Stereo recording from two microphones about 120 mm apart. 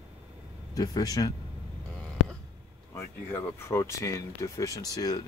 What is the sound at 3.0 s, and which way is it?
Speech, 20° left (ahead or behind).